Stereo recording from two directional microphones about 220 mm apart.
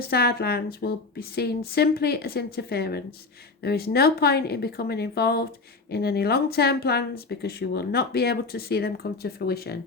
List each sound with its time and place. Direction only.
0.1 s speech: 45° left (ahead or behind)